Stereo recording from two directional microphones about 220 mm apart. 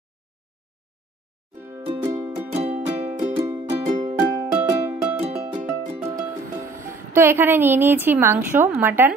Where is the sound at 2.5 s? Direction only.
30° right (ahead or behind).